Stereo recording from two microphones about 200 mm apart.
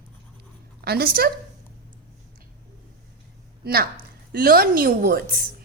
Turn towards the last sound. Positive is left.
turn(degrees=-50)  # may be behind; listen again after turning